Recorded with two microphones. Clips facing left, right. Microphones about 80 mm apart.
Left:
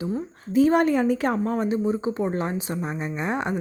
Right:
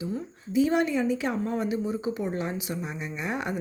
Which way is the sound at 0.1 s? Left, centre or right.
Left.